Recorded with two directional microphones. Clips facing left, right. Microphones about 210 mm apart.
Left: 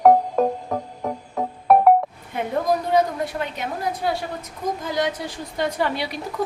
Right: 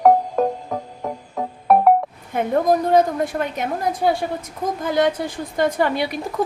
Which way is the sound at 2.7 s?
45° right (ahead or behind).